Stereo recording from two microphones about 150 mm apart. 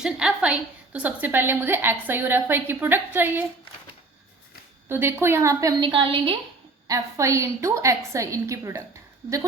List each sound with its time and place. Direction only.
0.0 s a woman's voice: 5° right (ahead or behind)
4.9 s a woman's voice: 15° right (ahead or behind)
5.9 s a woman's voice: 35° right (ahead or behind)
6.8 s a woman's voice: 20° right (ahead or behind)